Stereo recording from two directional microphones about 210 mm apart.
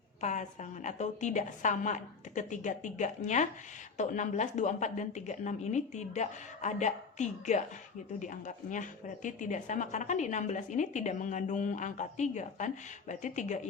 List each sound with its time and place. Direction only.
0.2 s speech: 35° left (ahead or behind)